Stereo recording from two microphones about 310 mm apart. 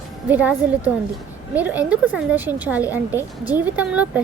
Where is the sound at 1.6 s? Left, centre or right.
Centre.